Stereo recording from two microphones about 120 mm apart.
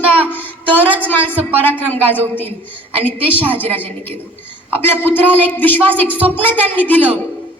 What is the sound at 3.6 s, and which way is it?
A woman's voice, 15° left (ahead or behind).